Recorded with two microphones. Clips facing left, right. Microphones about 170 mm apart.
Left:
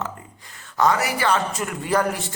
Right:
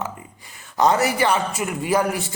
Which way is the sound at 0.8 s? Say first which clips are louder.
Right 2 dB; 25° right (ahead or behind).